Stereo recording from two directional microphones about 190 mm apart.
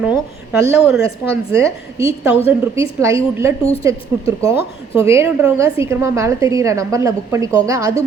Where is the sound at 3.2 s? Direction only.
15° right (ahead or behind).